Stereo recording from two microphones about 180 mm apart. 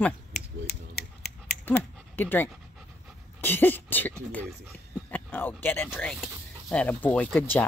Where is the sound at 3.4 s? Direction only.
10° left (ahead or behind).